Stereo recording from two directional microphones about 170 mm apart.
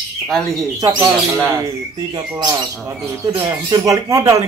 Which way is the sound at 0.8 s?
25° right (ahead or behind).